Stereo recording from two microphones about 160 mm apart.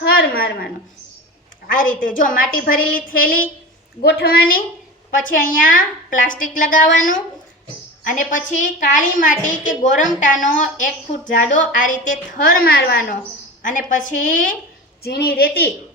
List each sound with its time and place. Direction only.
0.2 s a sound: 70° left (ahead or behind)
1.6 s a woman's voice: 60° left (ahead or behind)
4.0 s a woman's voice: 85° left
5.1 s a woman's voice: 55° left (ahead or behind)
13.6 s a woman's voice: 55° left (ahead or behind)
15.0 s a woman's voice: 80° left